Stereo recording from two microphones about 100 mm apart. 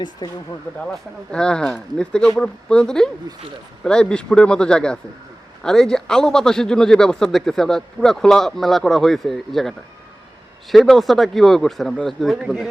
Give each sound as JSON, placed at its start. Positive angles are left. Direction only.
{"t": 0.2, "sound": "speech", "side_deg": 45}
{"t": 0.8, "sound": "speech", "side_deg": 10}